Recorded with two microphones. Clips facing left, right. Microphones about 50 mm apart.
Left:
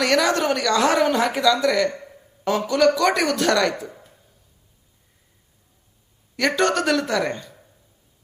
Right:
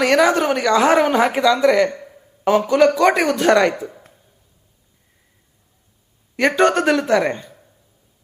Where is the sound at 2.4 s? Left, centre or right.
Centre.